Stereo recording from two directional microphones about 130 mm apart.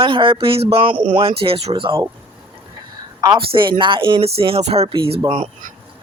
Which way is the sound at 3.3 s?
40° right (ahead or behind).